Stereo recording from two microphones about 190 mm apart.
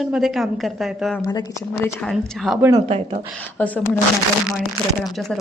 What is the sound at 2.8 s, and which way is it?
Speech, 35° right (ahead or behind).